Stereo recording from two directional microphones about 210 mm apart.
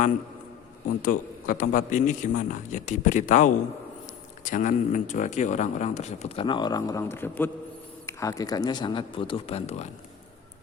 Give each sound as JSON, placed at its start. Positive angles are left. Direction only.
{"t": 1.0, "sound": "speech", "side_deg": 40}